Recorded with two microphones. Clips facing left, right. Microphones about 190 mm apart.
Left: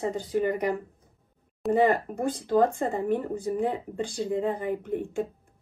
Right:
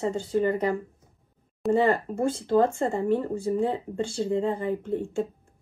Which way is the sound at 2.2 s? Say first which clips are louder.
Right 1 dB; 15° left (ahead or behind).